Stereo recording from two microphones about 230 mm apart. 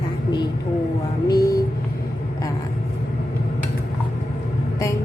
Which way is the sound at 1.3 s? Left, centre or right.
Centre.